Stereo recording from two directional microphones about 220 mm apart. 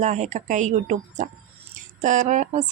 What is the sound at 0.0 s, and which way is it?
Speech, 30° right (ahead or behind).